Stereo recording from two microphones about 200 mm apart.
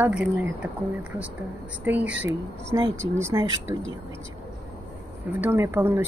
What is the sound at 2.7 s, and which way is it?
Speech, 20° right (ahead or behind).